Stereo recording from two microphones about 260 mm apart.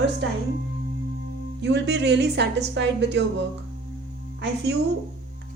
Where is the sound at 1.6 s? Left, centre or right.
Right.